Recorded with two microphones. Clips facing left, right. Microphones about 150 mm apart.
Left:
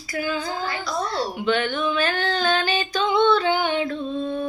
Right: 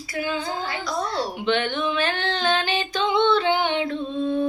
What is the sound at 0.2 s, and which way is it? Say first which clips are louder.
Hands: even; 25° right (ahead or behind).